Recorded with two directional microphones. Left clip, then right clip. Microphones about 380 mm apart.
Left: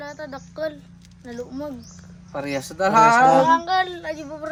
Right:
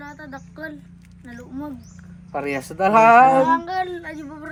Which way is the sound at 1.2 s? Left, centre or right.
Centre.